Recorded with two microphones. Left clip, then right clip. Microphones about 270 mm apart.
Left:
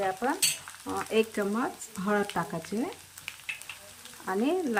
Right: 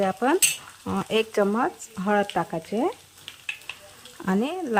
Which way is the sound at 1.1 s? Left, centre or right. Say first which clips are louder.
Right 6 dB; right.